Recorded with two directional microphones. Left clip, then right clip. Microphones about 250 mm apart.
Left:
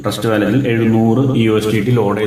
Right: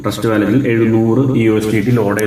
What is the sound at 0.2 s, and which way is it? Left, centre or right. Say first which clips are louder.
A man's voice: right 1 dB; centre.